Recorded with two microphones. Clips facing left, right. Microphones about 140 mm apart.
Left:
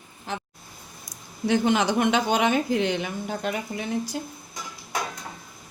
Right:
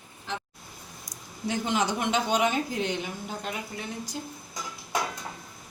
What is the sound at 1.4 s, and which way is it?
A woman's voice, 70° left (ahead or behind).